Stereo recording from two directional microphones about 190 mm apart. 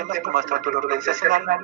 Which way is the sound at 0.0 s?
45° right (ahead or behind).